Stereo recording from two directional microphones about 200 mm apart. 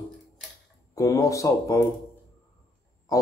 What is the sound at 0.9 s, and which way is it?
Speech, 15° left (ahead or behind).